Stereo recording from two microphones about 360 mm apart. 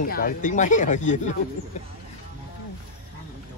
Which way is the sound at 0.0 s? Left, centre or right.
Left.